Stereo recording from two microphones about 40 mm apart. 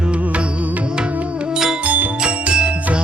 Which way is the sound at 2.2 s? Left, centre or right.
Right.